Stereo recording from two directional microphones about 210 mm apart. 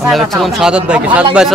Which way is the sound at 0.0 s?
Centre (ahead or behind).